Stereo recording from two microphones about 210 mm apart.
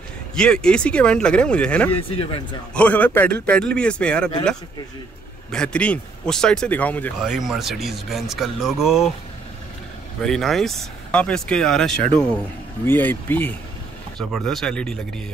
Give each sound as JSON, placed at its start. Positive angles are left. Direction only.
{"t": 0.4, "sound": "speech", "side_deg": 5}
{"t": 2.0, "sound": "speech", "side_deg": 25}
{"t": 2.7, "sound": "speech", "side_deg": 5}
{"t": 5.5, "sound": "speech", "side_deg": 5}
{"t": 10.2, "sound": "speech", "side_deg": 0}